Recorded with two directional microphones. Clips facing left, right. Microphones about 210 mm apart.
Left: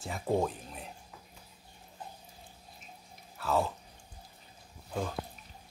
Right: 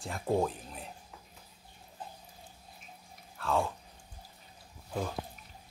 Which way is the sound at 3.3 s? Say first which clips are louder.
Left 1 dB; 5° left (ahead or behind).